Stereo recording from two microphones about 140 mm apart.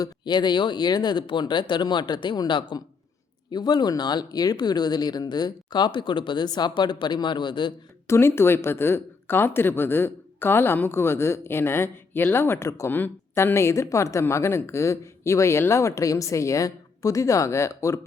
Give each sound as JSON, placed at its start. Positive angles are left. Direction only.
{"t": 0.0, "sound": "speech", "side_deg": 30}
{"t": 8.0, "sound": "speech", "side_deg": 20}